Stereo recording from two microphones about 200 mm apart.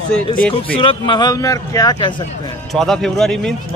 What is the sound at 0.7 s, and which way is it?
A man's voice, 25° left (ahead or behind).